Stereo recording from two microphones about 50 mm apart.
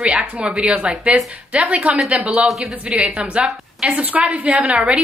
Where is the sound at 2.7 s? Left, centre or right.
Right.